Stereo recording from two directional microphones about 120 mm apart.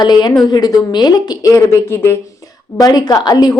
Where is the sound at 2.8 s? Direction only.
35° left (ahead or behind).